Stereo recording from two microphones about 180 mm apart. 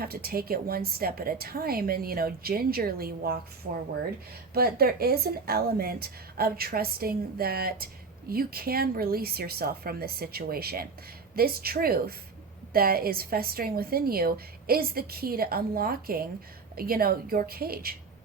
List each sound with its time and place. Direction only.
0.0 s a woman's voice: 55° right (ahead or behind)
4.5 s a woman's voice: 60° right (ahead or behind)